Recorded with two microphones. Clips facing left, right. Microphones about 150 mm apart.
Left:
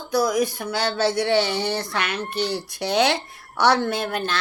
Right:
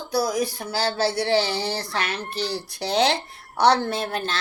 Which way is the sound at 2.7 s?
30° right (ahead or behind).